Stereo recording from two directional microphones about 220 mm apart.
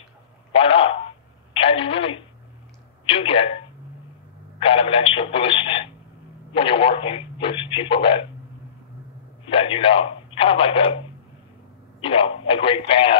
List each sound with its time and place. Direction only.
0.5 s speech: 25° left (ahead or behind)
1.5 s telephone: 25° left (ahead or behind)
3.1 s a sound: 25° left (ahead or behind)
4.6 s radio: 25° left (ahead or behind)
6.5 s speech: 25° left (ahead or behind)
9.5 s speech: 25° left (ahead or behind)
12.0 s speech: 25° left (ahead or behind)